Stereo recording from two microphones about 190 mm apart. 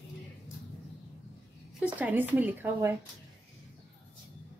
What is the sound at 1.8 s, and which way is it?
A woman's voice, 10° right (ahead or behind).